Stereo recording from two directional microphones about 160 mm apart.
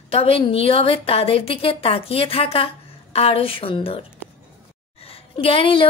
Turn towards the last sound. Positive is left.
turn(degrees=35)  # may be behind; listen again after turning